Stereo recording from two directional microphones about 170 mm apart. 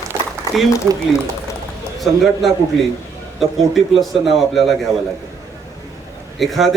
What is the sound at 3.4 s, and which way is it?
Speech, centre (ahead or behind).